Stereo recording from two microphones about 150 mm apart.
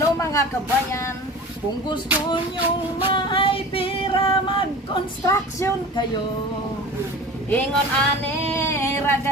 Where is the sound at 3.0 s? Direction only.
35° left (ahead or behind).